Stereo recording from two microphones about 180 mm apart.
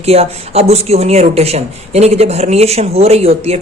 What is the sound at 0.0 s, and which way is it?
Speech, 35° right (ahead or behind).